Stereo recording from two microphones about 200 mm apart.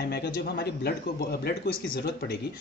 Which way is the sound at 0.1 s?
55° left (ahead or behind).